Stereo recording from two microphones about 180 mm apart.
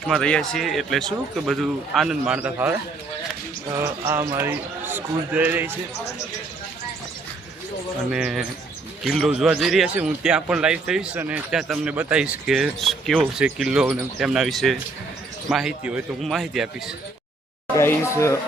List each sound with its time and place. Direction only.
0.0 s a man's voice: 5° left (ahead or behind)
8.1 s a man's voice: 5° right (ahead or behind)
17.7 s speech: 15° left (ahead or behind)